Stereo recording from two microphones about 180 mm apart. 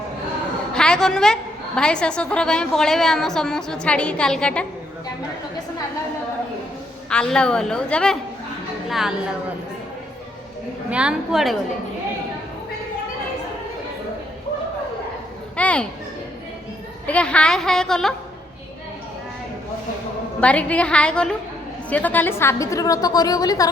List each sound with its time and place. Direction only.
0.7 s a woman's voice: 5° left (ahead or behind)
7.1 s a woman's voice: 5° left (ahead or behind)
10.8 s a woman's voice: 5° right (ahead or behind)
15.5 s children playing: 5° left (ahead or behind)
17.1 s a woman's voice: 5° left (ahead or behind)
20.4 s a woman's voice: 5° left (ahead or behind)